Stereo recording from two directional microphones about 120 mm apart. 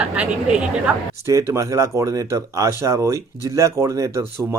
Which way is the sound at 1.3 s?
25° right (ahead or behind).